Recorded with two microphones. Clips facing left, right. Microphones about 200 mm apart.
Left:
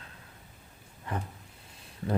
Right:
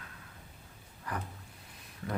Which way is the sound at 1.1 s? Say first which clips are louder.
Left 3 dB; 25° left (ahead or behind).